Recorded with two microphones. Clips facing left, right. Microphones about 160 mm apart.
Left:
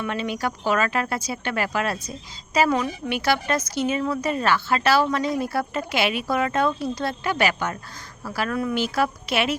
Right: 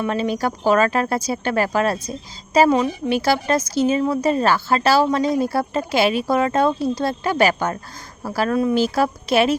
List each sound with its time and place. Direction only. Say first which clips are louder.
0.0 s speech: right 5 dB; 35° right (ahead or behind)
2.7 s a woman's voice: right 6 dB; 25° right (ahead or behind)
3.2 s speech: right 3 dB; 35° right (ahead or behind)